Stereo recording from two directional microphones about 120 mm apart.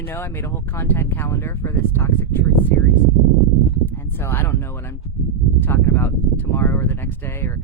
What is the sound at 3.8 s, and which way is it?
Speech, 20° left (ahead or behind).